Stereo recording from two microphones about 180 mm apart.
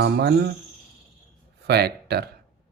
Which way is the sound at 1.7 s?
60° right (ahead or behind).